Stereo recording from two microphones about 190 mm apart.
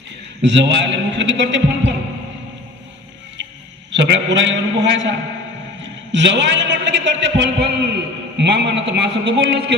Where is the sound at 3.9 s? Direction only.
70° right (ahead or behind).